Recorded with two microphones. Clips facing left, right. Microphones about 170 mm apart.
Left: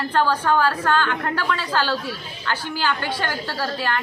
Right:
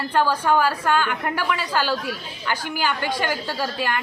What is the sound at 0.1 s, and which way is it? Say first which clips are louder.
Speech: right 1 dB; 10° right (ahead or behind).